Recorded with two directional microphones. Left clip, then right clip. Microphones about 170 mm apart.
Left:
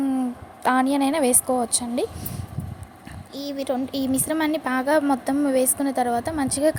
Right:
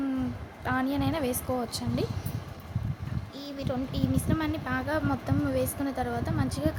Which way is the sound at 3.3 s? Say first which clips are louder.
Left 8 dB; 30° left (ahead or behind).